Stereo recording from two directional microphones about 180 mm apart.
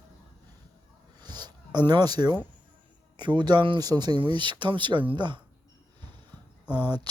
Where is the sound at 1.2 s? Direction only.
20° right (ahead or behind).